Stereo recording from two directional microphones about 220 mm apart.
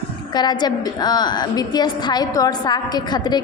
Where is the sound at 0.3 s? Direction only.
20° left (ahead or behind).